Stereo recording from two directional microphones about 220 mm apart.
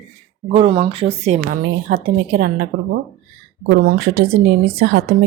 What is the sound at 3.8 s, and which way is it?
Speech, 45° right (ahead or behind).